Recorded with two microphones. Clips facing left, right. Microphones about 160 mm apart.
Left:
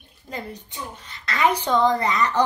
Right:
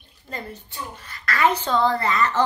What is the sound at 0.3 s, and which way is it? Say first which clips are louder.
A child's voice: left 1 dB; 15° left (ahead or behind).